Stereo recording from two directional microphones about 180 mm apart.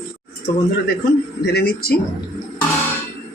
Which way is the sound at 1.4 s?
60° left (ahead or behind).